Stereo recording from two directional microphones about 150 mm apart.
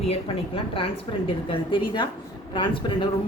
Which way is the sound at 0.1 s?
35° left (ahead or behind).